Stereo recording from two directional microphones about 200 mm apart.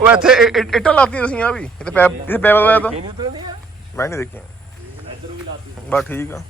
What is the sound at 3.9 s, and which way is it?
Speech, 15° left (ahead or behind).